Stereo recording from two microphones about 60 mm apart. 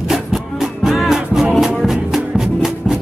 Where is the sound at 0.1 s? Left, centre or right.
Centre.